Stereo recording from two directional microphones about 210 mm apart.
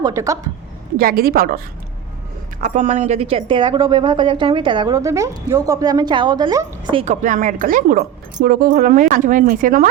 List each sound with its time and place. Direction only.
0.0 s speech: 15° right (ahead or behind)
0.9 s a woman's voice: 45° right (ahead or behind)
2.6 s speech: 35° right (ahead or behind); by 7.0 s 20° right (ahead or behind)
7.0 s speech: 35° right (ahead or behind)